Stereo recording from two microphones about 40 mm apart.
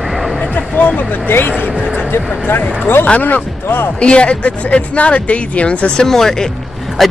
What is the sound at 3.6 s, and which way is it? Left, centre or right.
Speech, left.